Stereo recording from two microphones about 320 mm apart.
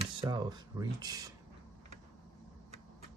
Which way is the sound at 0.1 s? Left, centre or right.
Centre.